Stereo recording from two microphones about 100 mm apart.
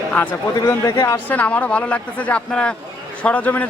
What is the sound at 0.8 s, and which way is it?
Speech, 40° left (ahead or behind).